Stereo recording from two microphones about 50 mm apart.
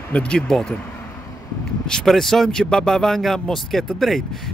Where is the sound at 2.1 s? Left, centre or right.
Centre.